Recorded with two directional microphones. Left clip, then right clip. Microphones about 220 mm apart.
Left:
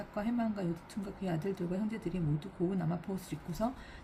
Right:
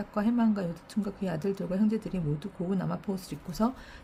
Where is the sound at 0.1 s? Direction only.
50° right (ahead or behind).